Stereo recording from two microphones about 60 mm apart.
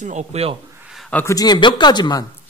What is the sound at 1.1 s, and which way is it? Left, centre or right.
Speech, left.